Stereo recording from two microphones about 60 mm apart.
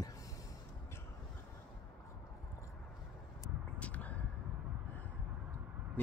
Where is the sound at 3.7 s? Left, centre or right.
Left.